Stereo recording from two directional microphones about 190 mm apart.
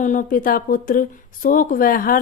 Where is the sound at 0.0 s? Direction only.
45° left (ahead or behind).